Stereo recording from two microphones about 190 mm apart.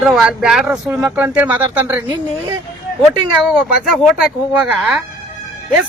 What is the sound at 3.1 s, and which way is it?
Speech, centre (ahead or behind).